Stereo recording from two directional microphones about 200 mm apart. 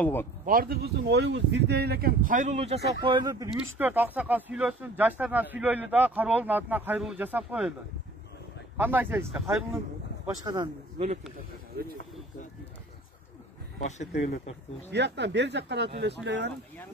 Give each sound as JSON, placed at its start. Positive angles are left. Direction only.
{"t": 0.0, "sound": "speech", "side_deg": 10}
{"t": 0.5, "sound": "speech", "side_deg": -45}
{"t": 3.7, "sound": "speech", "side_deg": -10}
{"t": 8.7, "sound": "speech", "side_deg": -10}
{"t": 10.2, "sound": "speech", "side_deg": -20}
{"t": 14.1, "sound": "speech", "side_deg": 55}
{"t": 14.9, "sound": "speech", "side_deg": -60}